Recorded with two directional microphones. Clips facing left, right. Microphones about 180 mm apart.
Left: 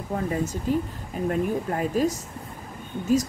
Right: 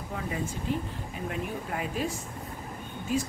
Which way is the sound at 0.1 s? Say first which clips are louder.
Left 7 dB; 45° left (ahead or behind).